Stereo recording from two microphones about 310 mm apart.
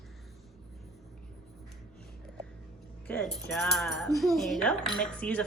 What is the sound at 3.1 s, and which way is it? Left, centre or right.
A child's voice, centre.